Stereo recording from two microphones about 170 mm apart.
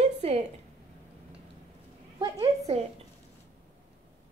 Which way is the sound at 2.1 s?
25° right (ahead or behind).